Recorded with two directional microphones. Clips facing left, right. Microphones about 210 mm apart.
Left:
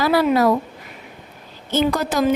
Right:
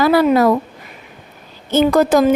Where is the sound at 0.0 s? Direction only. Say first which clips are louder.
Right 4 dB; 50° right (ahead or behind).